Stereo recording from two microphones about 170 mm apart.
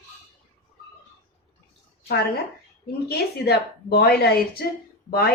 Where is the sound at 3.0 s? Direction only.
70° left (ahead or behind).